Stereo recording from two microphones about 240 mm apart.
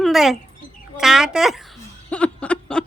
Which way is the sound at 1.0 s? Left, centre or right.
Centre.